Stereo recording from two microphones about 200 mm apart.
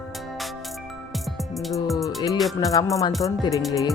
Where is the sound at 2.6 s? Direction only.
15° left (ahead or behind).